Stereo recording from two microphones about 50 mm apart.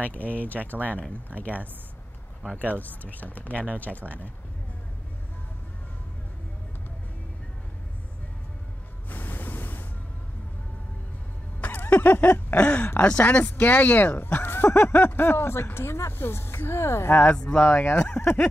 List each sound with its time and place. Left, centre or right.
0.0 s speech: left
2.5 s speech: left
9.1 s music: left
11.6 s a sound: left
13.2 s speech: left
17.2 s speech: left
17.7 s speech: left